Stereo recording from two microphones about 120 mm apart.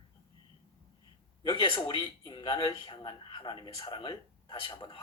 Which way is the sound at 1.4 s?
40° left (ahead or behind).